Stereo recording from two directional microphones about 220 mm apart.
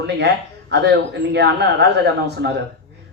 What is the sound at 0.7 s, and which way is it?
Speech, 50° right (ahead or behind).